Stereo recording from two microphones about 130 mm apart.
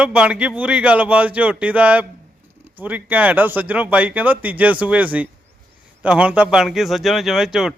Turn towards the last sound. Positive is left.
turn(degrees=-5)  # may be behind; listen again after turning